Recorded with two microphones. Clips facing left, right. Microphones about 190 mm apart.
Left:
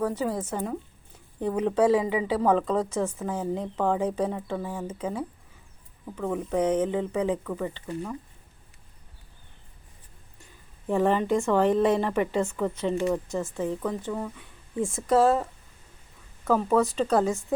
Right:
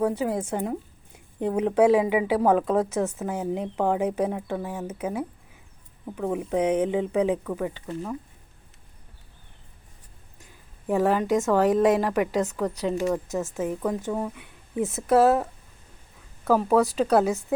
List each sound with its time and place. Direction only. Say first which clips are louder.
0.2 s a woman's voice: right 2 dB; 10° right (ahead or behind)
10.8 s a woman's voice: right 1 dB; 5° right (ahead or behind)
14.9 s a woman's voice: right 2 dB; 5° right (ahead or behind)